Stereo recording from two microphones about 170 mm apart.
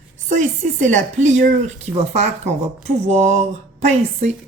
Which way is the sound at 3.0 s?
45° right (ahead or behind).